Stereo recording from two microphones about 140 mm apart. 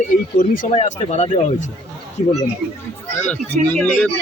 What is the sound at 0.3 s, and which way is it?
Speech, 75° left (ahead or behind).